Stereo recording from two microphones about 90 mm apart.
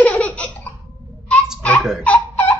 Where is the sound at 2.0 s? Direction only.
20° left (ahead or behind).